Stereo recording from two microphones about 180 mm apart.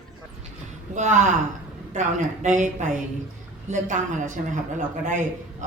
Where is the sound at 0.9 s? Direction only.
40° right (ahead or behind).